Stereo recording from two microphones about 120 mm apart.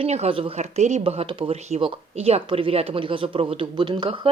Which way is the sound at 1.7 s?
55° right (ahead or behind).